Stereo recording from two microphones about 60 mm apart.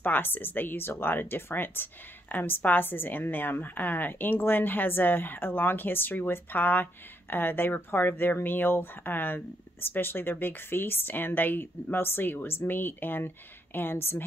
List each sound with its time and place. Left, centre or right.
0.0 s speech: left